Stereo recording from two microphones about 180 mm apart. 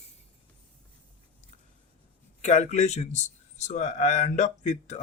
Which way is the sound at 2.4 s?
40° left (ahead or behind).